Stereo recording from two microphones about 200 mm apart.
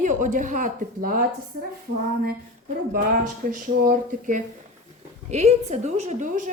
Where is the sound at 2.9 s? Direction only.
45° right (ahead or behind).